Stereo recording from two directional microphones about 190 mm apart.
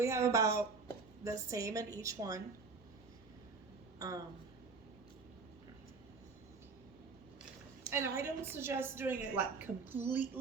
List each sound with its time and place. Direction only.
0.0 s a woman's voice: 15° right (ahead or behind)
3.9 s a sound: 20° right (ahead or behind)
7.9 s a woman's voice: 15° right (ahead or behind)